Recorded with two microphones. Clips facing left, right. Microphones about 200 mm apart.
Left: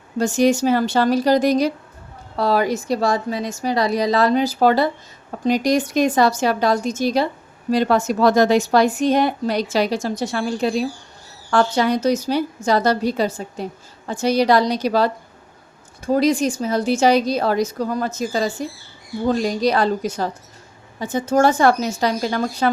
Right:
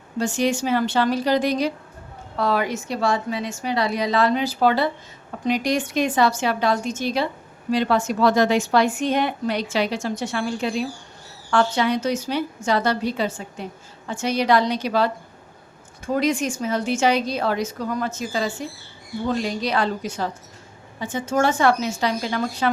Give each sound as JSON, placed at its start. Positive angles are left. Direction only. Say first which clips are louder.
{"t": 0.2, "sound": "a woman's voice", "louder": "left 5 dB", "side_deg": 40}